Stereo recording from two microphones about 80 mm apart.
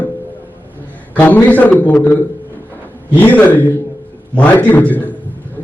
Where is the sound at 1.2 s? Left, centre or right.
Left.